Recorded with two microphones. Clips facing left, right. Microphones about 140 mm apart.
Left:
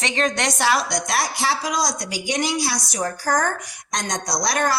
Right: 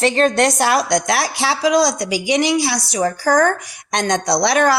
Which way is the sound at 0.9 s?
85° right.